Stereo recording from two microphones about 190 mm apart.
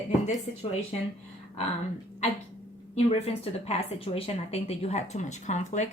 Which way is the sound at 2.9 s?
35° left (ahead or behind).